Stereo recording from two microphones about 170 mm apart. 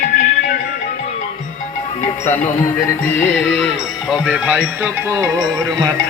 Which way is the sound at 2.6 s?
10° left (ahead or behind).